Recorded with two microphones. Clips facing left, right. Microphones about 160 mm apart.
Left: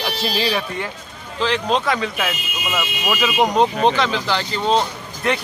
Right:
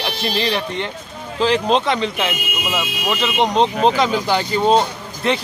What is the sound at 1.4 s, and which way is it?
Speech, 35° right (ahead or behind).